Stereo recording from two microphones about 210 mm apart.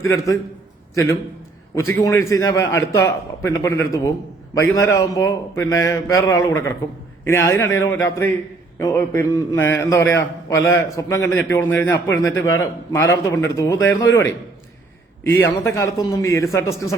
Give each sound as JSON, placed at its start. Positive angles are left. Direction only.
{"t": 0.0, "sound": "a man's voice", "side_deg": 15}
{"t": 1.7, "sound": "a man's voice", "side_deg": 15}
{"t": 15.4, "sound": "a man's voice", "side_deg": 10}